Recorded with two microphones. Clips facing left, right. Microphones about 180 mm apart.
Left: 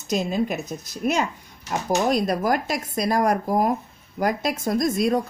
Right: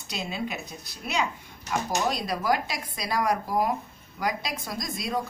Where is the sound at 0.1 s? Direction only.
45° left (ahead or behind).